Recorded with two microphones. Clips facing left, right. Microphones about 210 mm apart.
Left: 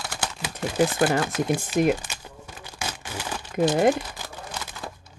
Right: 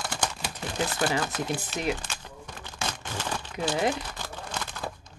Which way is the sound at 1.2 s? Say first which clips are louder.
Left 6 dB; 10° left (ahead or behind).